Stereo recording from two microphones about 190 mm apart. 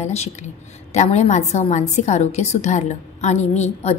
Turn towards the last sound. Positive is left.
turn(degrees=35)  # may be behind; listen again after turning